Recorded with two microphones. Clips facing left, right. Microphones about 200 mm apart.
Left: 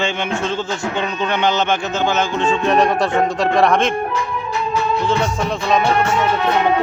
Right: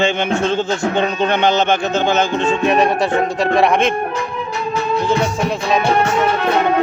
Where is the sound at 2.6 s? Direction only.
5° right (ahead or behind).